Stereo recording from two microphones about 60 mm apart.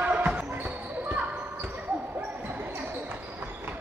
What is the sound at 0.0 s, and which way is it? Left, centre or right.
Basketball bounce, right.